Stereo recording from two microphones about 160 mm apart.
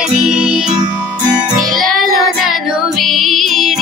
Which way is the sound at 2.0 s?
Centre (ahead or behind).